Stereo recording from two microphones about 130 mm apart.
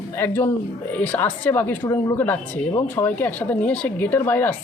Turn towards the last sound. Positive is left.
turn(degrees=15)  # may be behind; listen again after turning